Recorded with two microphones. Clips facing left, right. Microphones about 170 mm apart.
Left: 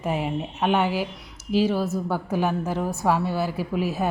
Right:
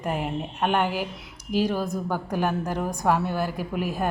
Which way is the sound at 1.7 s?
15° right (ahead or behind).